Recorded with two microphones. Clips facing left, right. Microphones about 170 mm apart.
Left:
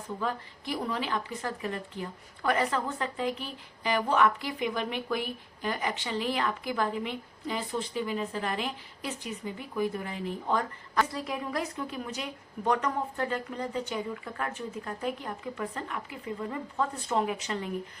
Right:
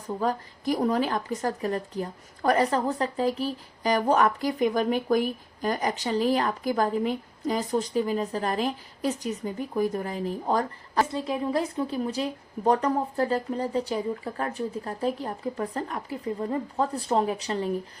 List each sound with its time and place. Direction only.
0.2 s a woman's voice: 40° right (ahead or behind)